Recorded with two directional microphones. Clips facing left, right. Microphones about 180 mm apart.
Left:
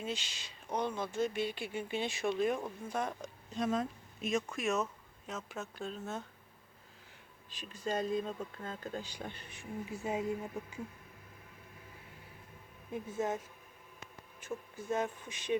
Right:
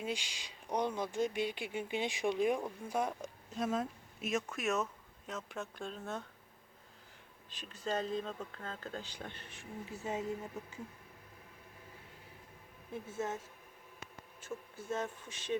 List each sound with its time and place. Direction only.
0.0 s speech: 10° right (ahead or behind); by 6.2 s 5° left (ahead or behind)
7.5 s speech: 10° left (ahead or behind)
12.9 s speech: 15° left (ahead or behind)
14.4 s speech: 15° left (ahead or behind)